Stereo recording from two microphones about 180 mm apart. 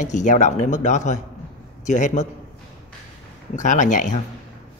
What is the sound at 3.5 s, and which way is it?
Speech, 45° left (ahead or behind).